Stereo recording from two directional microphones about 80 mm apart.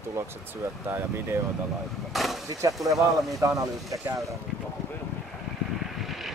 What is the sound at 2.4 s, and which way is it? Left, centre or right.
Speech, right.